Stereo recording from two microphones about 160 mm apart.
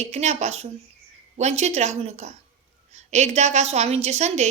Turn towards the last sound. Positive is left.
turn(degrees=-45)  # may be behind; listen again after turning